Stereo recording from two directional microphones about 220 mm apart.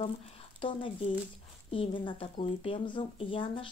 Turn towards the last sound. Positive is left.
turn(degrees=20)  # may be behind; listen again after turning